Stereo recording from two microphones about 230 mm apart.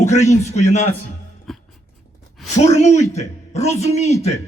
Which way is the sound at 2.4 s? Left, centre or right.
Left.